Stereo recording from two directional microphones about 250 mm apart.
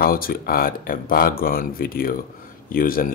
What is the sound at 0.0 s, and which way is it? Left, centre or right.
Speech, left.